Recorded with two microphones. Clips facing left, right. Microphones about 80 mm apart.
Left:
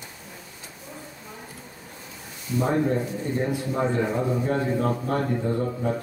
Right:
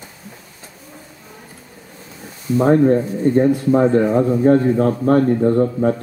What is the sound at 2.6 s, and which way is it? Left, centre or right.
Speech, right.